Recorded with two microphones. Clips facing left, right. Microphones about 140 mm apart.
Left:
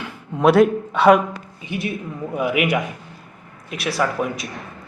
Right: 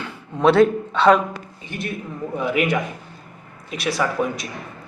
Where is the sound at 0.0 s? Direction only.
5° left (ahead or behind).